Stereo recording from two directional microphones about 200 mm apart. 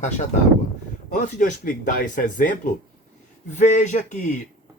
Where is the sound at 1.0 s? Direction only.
40° left (ahead or behind).